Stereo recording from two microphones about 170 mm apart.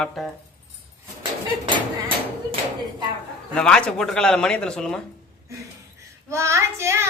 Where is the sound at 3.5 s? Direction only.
5° left (ahead or behind).